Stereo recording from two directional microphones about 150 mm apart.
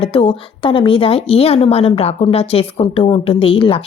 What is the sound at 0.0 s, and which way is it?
Speech, 35° left (ahead or behind).